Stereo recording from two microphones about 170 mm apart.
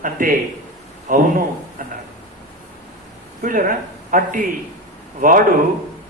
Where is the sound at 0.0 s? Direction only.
55° right (ahead or behind).